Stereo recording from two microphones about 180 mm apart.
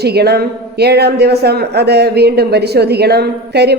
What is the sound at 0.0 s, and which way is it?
A woman's voice, 65° right (ahead or behind).